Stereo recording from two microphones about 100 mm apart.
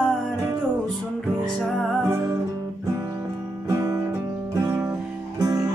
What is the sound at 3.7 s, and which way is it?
Music, 35° right (ahead or behind).